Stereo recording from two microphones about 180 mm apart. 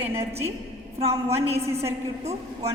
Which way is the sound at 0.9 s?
35° right (ahead or behind).